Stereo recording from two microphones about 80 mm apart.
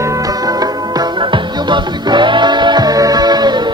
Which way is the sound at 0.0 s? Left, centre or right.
Right.